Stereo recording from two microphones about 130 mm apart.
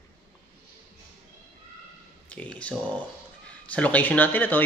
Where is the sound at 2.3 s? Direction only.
10° left (ahead or behind).